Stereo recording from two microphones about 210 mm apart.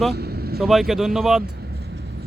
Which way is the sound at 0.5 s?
Centre (ahead or behind).